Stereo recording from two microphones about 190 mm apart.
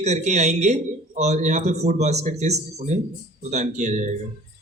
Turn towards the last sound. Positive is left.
turn(degrees=-40)  # may be behind; listen again after turning